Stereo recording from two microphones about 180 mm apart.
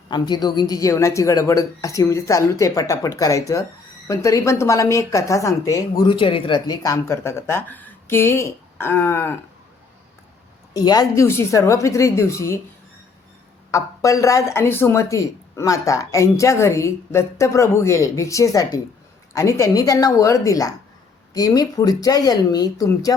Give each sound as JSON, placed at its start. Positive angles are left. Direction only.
{"t": 0.1, "sound": "a woman's voice", "side_deg": 25}
{"t": 10.8, "sound": "a woman's voice", "side_deg": 20}
{"t": 13.7, "sound": "a woman's voice", "side_deg": 15}